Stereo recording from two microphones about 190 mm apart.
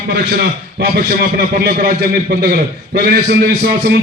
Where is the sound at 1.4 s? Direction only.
55° right (ahead or behind).